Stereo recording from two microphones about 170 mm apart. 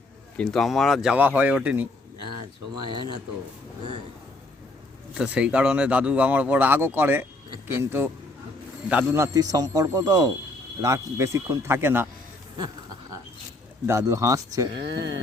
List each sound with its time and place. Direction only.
0.3 s speech: centre (ahead or behind)
2.7 s a man's voice: 25° right (ahead or behind)
5.1 s a man's voice: 5° right (ahead or behind)
12.5 s a sound: 20° right (ahead or behind)
13.8 s a man's voice: 15° right (ahead or behind)
14.8 s speech: 90° right